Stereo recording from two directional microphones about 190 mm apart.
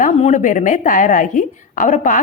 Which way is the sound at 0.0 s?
40° left (ahead or behind).